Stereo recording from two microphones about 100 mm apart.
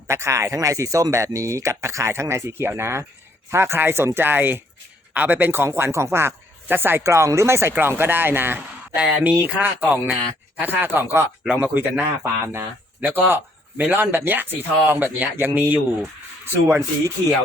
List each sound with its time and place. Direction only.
0.1 s a man's voice: 30° right (ahead or behind)
9.0 s speech: 5° right (ahead or behind)
9.4 s a man's voice: 20° right (ahead or behind)